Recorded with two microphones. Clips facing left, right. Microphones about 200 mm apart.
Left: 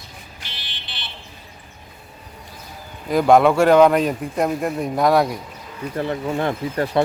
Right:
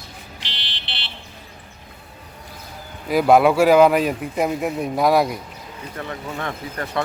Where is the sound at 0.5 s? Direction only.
70° right (ahead or behind).